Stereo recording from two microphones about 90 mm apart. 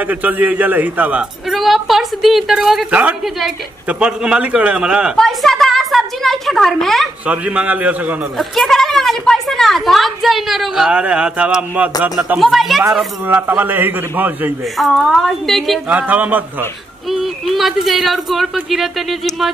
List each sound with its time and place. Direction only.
0.0 s a man's voice: 20° right (ahead or behind)
1.5 s a woman's voice: centre (ahead or behind)
2.9 s a man's voice: 15° right (ahead or behind)
5.1 s a sound: centre (ahead or behind)
7.2 s a man's voice: 15° right (ahead or behind)
8.4 s a woman's voice: 5° left (ahead or behind); by 12.4 s 15° right (ahead or behind)
12.4 s a woman's voice: centre (ahead or behind)
13.3 s a man's voice: 20° right (ahead or behind)
14.8 s a woman's voice: centre (ahead or behind)
15.9 s a man's voice: 15° right (ahead or behind)
17.1 s a woman's voice: centre (ahead or behind)